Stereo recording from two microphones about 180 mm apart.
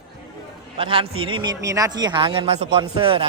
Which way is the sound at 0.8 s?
30° right (ahead or behind).